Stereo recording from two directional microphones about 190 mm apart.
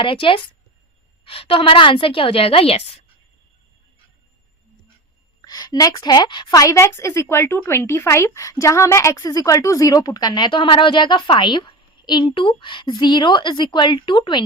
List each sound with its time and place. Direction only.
0.0 s a woman's voice: 25° left (ahead or behind)
5.4 s a woman's voice: 20° left (ahead or behind)